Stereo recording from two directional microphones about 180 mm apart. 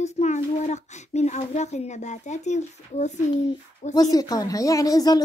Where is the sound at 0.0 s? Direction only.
40° left (ahead or behind).